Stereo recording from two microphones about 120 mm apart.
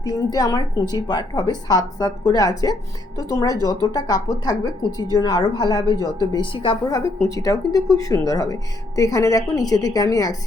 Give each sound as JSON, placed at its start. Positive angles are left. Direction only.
{"t": 0.0, "sound": "a woman's voice", "side_deg": 35}
{"t": 6.3, "sound": "a woman's voice", "side_deg": 45}
{"t": 6.8, "sound": "a woman's voice", "side_deg": 30}